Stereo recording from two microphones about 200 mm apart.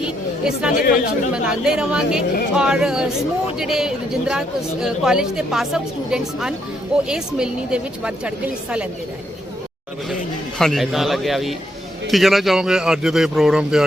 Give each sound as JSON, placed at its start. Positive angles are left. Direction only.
{"t": 0.0, "sound": "chatter", "side_deg": -5}
{"t": 0.8, "sound": "speech", "side_deg": 45}
{"t": 1.3, "sound": "speech", "side_deg": -5}
{"t": 10.6, "sound": "speech", "side_deg": 0}